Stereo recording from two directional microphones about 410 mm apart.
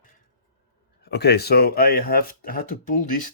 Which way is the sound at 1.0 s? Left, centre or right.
Left.